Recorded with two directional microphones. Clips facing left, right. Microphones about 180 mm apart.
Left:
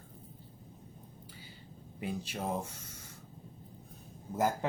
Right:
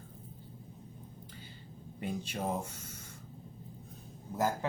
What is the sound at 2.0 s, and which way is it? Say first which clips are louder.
Speech: right 1 dB; 5° left (ahead or behind).